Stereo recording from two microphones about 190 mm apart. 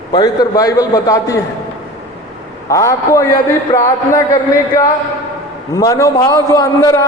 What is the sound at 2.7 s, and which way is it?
A man's voice, 15° left (ahead or behind).